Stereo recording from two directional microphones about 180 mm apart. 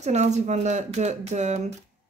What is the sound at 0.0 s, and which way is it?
Speech, 40° right (ahead or behind).